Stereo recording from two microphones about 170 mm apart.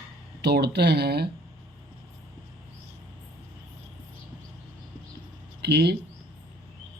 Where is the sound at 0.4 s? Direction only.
75° right (ahead or behind).